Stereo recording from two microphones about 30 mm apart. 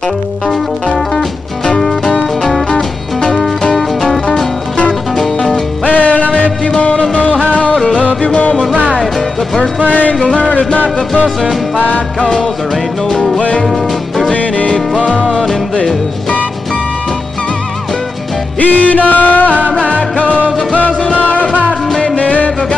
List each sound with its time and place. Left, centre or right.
5.9 s music: left
9.8 s music: left
10.2 s music: left
13.6 s music: centre
14.3 s music: left
18.6 s music: left
20.7 s music: left